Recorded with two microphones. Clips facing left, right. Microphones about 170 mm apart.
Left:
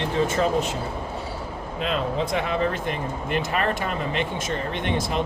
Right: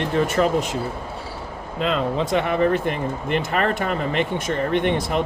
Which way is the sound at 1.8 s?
60° right (ahead or behind).